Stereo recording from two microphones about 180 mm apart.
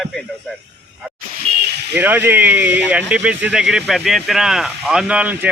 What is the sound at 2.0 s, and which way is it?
Speech, 10° right (ahead or behind).